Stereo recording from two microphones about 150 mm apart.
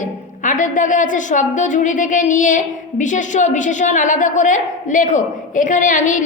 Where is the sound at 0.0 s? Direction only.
60° left (ahead or behind).